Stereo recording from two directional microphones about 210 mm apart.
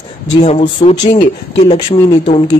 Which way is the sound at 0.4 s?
30° left (ahead or behind).